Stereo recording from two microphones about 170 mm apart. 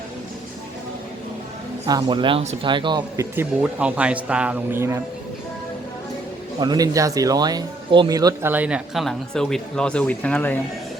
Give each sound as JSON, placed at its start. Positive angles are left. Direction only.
{"t": 1.9, "sound": "speech", "side_deg": -25}
{"t": 3.3, "sound": "speech", "side_deg": -5}
{"t": 6.6, "sound": "speech", "side_deg": -25}